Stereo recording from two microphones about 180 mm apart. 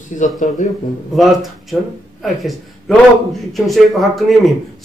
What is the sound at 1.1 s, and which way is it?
Speech, centre (ahead or behind).